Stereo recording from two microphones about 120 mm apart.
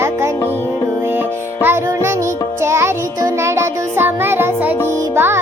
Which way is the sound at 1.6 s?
20° right (ahead or behind).